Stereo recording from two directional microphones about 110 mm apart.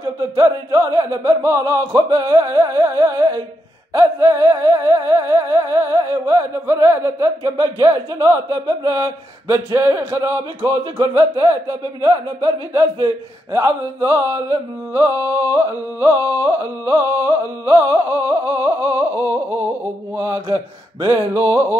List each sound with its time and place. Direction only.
0.0 s music: 35° right (ahead or behind)
21.3 s speech: 25° right (ahead or behind)